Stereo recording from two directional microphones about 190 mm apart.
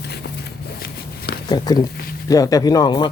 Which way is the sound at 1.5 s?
20° left (ahead or behind).